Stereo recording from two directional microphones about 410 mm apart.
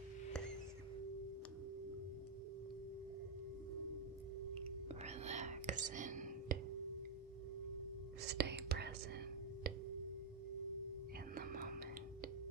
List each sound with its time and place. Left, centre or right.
4.8 s whispering: centre
8.3 s whispering: right
11.3 s whispering: right